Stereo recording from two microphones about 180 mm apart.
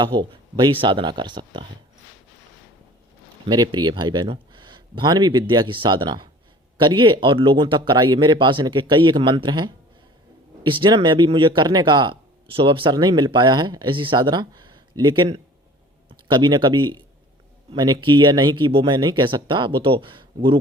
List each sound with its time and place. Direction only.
0.0 s speech: 25° right (ahead or behind)
3.4 s speech: 25° right (ahead or behind)